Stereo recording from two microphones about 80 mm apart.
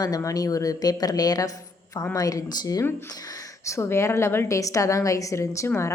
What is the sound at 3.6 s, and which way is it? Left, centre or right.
Speech, left.